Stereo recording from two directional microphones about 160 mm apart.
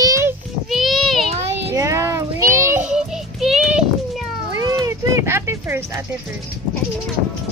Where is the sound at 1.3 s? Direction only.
40° right (ahead or behind).